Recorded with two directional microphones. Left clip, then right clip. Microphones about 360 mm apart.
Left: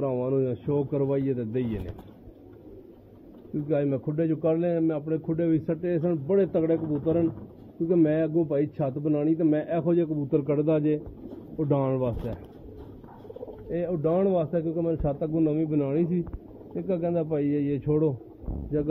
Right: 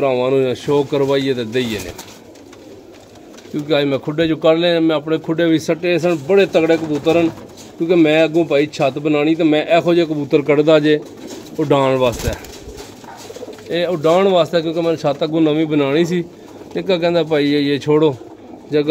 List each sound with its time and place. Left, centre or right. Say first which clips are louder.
0.0 s a man's voice: right 12 dB; centre
3.6 s a man's voice: right 10 dB; centre
7.9 s a man's voice: right 11 dB; centre
13.7 s a man's voice: right 12 dB; centre